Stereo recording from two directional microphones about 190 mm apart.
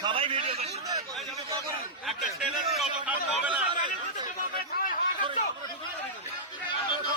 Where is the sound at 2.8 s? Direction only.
5° right (ahead or behind).